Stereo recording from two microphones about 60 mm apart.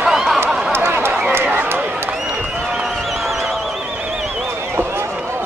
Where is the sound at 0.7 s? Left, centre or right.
Right.